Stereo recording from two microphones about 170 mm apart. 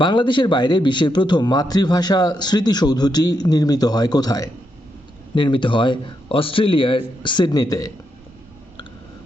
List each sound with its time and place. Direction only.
0.0 s a man's voice: 25° left (ahead or behind)